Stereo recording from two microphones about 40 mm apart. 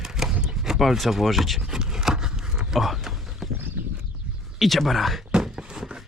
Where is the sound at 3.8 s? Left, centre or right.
Right.